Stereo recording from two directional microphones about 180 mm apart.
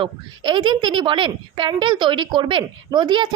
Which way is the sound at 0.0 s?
25° right (ahead or behind).